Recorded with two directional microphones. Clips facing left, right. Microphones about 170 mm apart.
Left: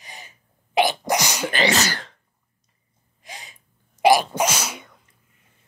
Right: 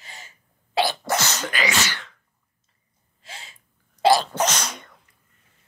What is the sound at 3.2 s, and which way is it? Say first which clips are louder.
Sneeze: left 2 dB; 15° left (ahead or behind).